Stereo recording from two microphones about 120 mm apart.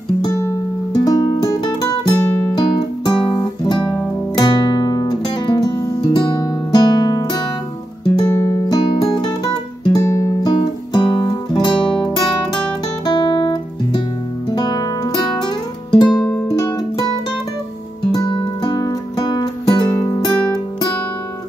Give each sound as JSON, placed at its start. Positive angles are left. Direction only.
{"t": 0.9, "sound": "music", "side_deg": 35}
{"t": 2.1, "sound": "music", "side_deg": 20}
{"t": 2.5, "sound": "music", "side_deg": 40}
{"t": 8.3, "sound": "music", "side_deg": 20}
{"t": 8.6, "sound": "music", "side_deg": 35}
{"t": 10.5, "sound": "music", "side_deg": 40}
{"t": 13.0, "sound": "guitar", "side_deg": 40}
{"t": 14.5, "sound": "music", "side_deg": 35}
{"t": 18.1, "sound": "music", "side_deg": 40}